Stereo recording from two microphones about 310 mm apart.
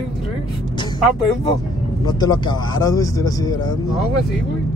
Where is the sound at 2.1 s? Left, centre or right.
Centre.